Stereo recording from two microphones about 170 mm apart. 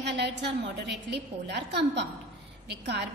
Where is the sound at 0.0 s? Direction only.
90° right.